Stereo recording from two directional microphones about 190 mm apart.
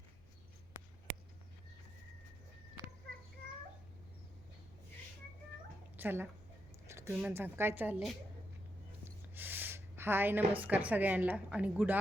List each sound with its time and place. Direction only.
2.8 s a sound: 20° right (ahead or behind)
6.0 s a woman's voice: 10° right (ahead or behind)
9.3 s a woman's voice: 10° right (ahead or behind)